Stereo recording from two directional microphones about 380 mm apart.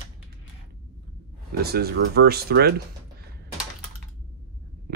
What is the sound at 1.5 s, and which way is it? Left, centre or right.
Speech, right.